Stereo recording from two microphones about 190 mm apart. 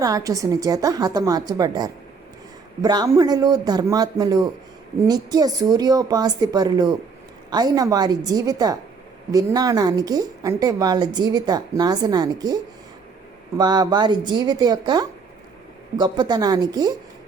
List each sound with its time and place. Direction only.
0.0 s a woman's voice: 15° right (ahead or behind)
13.6 s a woman's voice: 20° right (ahead or behind)